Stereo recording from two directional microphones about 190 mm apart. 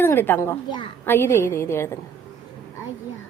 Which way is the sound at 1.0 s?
10° left (ahead or behind).